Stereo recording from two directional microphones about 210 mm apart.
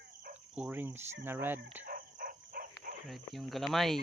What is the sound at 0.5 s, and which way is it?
Speech, 5° right (ahead or behind).